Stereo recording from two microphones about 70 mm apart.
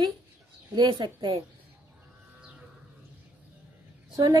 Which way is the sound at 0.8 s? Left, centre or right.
Right.